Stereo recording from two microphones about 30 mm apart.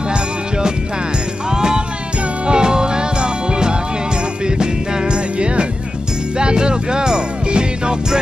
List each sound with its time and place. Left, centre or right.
0.1 s music: right